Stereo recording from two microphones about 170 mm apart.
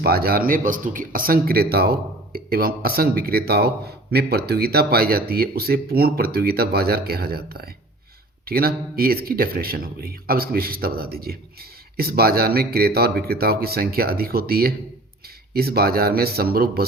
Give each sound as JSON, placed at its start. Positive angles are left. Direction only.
{"t": 0.0, "sound": "speech", "side_deg": -65}